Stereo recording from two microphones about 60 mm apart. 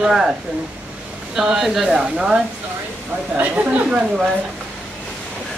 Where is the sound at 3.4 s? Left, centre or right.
Right.